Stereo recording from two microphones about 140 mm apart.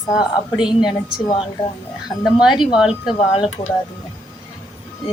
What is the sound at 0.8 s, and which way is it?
Speech, 30° left (ahead or behind).